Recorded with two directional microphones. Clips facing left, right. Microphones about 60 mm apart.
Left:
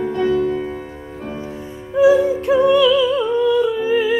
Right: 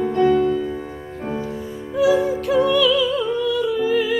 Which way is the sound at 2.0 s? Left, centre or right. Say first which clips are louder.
Left 4 dB; left.